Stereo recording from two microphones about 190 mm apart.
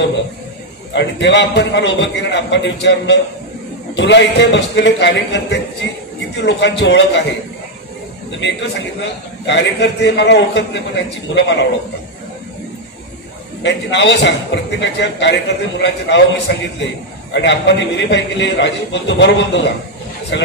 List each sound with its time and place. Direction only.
0.9 s a man's voice: 65° left (ahead or behind)
8.4 s a man's voice: 65° left (ahead or behind)
13.6 s a man's voice: 70° left (ahead or behind)